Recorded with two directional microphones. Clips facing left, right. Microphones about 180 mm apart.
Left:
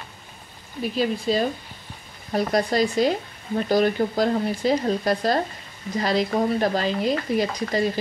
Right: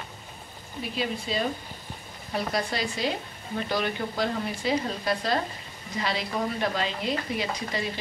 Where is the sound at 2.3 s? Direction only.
45° left (ahead or behind).